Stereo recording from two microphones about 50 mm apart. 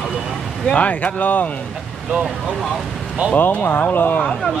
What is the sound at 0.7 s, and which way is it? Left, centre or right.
Speech, left.